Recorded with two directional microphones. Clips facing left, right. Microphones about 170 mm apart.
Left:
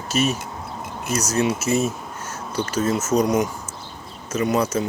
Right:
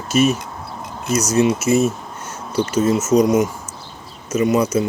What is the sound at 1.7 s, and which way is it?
Speech, 35° left (ahead or behind).